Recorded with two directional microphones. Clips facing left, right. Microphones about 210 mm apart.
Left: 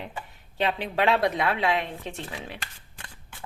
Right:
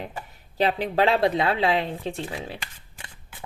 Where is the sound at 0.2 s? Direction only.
40° right (ahead or behind).